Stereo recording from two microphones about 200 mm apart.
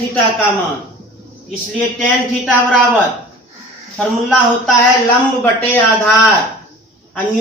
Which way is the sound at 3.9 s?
Centre (ahead or behind).